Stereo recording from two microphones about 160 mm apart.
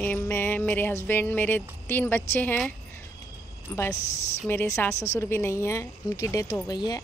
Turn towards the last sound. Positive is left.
turn(degrees=25)  # may be behind; listen again after turning